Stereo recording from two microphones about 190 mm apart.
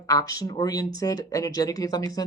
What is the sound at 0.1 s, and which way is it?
Speech, 20° left (ahead or behind).